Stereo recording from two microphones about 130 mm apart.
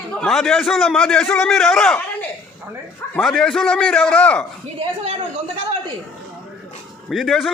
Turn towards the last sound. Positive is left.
turn(degrees=0)  # may be behind; listen again after turning